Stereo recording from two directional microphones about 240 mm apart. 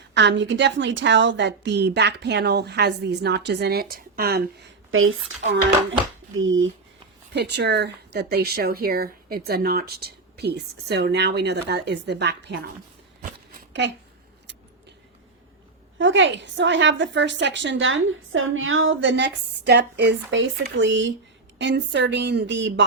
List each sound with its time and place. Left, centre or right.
0.1 s speech: right
4.9 s speech: right
7.3 s speech: right
13.5 s a sound: right
16.0 s speech: right